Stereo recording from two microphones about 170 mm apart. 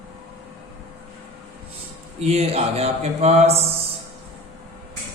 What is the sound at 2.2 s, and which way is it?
Speech, 35° right (ahead or behind).